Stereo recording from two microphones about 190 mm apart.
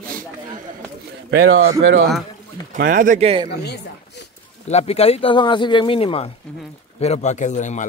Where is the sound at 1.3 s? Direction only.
90° right.